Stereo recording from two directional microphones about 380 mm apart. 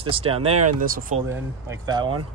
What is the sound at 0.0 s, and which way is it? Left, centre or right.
Speech, centre.